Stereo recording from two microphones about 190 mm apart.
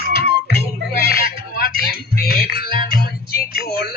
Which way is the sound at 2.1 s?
55° left (ahead or behind).